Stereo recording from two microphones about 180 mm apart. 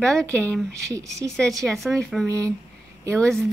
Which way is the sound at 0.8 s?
15° right (ahead or behind).